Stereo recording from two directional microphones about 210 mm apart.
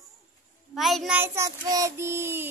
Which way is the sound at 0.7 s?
Centre (ahead or behind).